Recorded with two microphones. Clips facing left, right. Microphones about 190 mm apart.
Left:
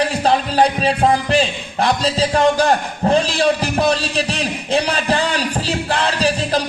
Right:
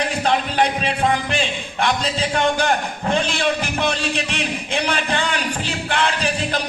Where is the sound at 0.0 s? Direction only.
35° left (ahead or behind).